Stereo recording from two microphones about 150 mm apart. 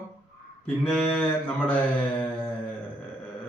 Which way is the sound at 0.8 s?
5° left (ahead or behind).